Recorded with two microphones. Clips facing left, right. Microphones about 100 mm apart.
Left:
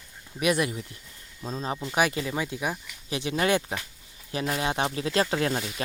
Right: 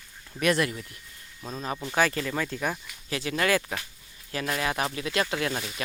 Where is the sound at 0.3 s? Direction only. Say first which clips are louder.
Even; 15° left (ahead or behind).